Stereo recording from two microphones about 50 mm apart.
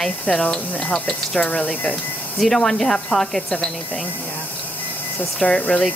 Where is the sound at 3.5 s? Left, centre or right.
Centre.